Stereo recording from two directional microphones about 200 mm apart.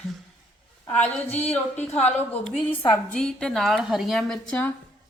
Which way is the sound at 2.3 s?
5° left (ahead or behind).